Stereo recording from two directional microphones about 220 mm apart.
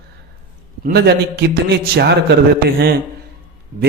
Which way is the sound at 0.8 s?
50° right (ahead or behind).